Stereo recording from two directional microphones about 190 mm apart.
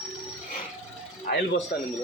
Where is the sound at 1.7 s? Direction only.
60° left (ahead or behind).